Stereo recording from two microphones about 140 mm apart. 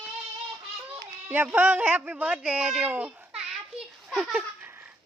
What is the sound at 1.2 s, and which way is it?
Speech, 10° right (ahead or behind).